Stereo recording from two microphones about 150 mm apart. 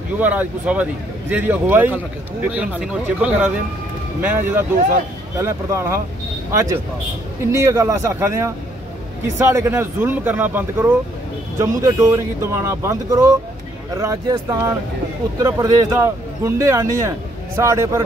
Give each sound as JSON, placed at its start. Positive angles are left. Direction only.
{"t": 0.2, "sound": "a man's voice", "side_deg": -10}
{"t": 9.5, "sound": "a man's voice", "side_deg": -15}